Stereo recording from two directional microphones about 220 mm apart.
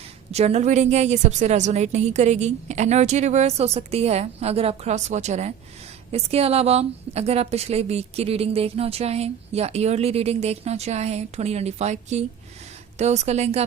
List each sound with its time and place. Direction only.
0.3 s a woman's voice: 30° right (ahead or behind)